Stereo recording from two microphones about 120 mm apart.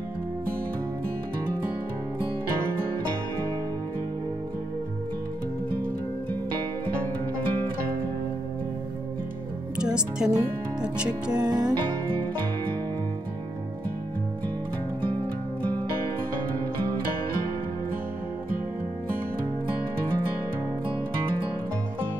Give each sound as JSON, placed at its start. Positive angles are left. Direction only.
{"t": 10.2, "sound": "speech", "side_deg": -10}
{"t": 11.3, "sound": "music", "side_deg": -35}